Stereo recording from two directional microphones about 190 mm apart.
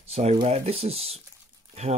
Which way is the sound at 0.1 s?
35° right (ahead or behind).